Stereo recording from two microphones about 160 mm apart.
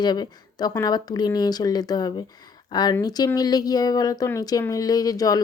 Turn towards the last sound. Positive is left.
turn(degrees=20)  # may be behind; listen again after turning